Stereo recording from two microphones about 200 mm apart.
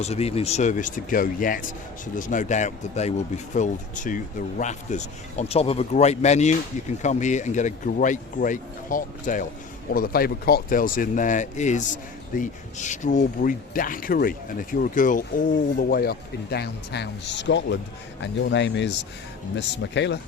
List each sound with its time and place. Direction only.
0.0 s speech: 30° left (ahead or behind); by 20.1 s 60° left (ahead or behind)